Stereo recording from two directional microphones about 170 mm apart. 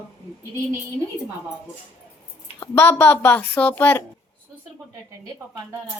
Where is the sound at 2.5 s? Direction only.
15° left (ahead or behind).